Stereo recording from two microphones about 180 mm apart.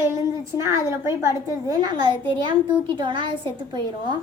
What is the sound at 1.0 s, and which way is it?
A woman's voice, 15° right (ahead or behind).